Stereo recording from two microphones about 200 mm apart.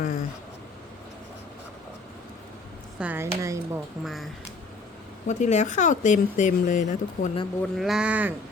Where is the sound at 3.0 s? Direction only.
10° right (ahead or behind).